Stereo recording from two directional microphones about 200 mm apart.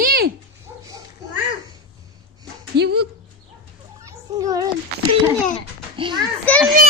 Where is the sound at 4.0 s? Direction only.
15° right (ahead or behind).